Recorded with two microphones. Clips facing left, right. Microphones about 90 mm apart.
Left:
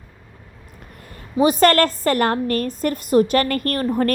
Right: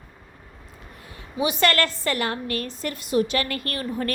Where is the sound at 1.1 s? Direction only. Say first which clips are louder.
Left 8 dB; 40° left (ahead or behind).